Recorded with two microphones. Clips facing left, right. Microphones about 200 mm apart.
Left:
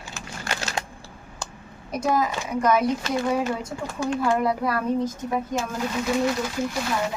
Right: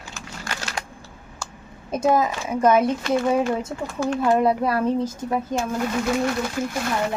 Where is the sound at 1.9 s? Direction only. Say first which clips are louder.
Right 4 dB; 25° right (ahead or behind).